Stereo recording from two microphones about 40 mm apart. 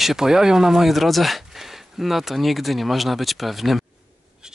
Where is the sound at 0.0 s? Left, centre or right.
Centre.